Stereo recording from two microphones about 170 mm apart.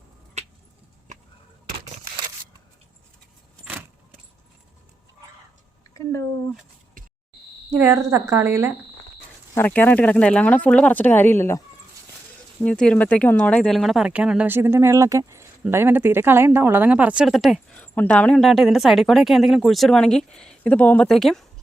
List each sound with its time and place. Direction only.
0.4 s keys jangling: 40° right (ahead or behind)
3.6 s keys jangling: 10° right (ahead or behind)
5.9 s a sound: 15° left (ahead or behind)
7.8 s speech: 15° right (ahead or behind)
9.6 s speech: 10° left (ahead or behind)
12.6 s speech: 5° left (ahead or behind)